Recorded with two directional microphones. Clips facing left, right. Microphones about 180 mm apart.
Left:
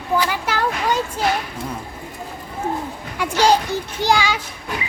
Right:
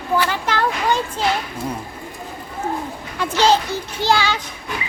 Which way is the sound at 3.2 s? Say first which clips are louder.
Even; 10° left (ahead or behind).